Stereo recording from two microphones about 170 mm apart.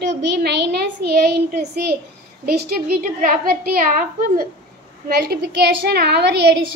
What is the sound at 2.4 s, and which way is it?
Child singing, 65° right (ahead or behind).